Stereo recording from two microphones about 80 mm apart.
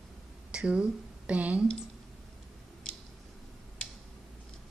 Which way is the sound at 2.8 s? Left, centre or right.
Centre.